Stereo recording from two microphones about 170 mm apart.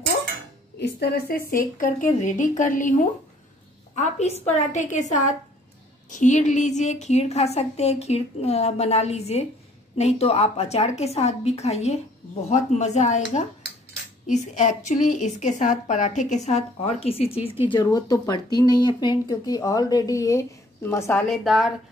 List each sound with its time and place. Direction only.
0.7 s a woman's voice: 75° left (ahead or behind); by 17.6 s 35° left (ahead or behind)
17.6 s speech: 25° left (ahead or behind)
21.3 s a woman's voice: centre (ahead or behind)